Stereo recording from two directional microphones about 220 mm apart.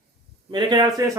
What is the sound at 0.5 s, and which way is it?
Speech, 20° right (ahead or behind).